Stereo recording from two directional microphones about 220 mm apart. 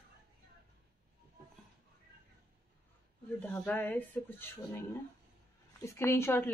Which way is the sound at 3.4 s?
5° left (ahead or behind).